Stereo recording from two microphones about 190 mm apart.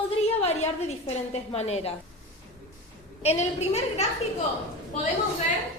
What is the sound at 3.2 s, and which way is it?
Speech, 35° left (ahead or behind).